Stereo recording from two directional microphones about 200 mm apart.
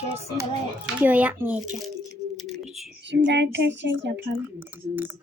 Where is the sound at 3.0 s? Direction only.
60° right (ahead or behind).